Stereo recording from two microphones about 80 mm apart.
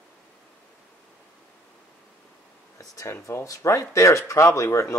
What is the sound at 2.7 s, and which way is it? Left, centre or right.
Speech, left.